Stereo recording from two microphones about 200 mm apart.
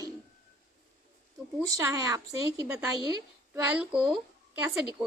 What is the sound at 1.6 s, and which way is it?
A woman's voice, 15° right (ahead or behind).